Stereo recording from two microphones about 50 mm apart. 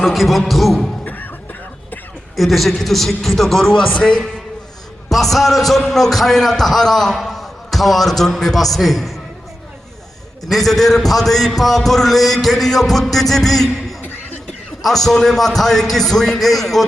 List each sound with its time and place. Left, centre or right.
0.0 s a man's voice: centre
1.0 s music: left
2.3 s a man's voice: centre
5.0 s a man's voice: centre
10.5 s a man's voice: centre
14.8 s a man's voice: centre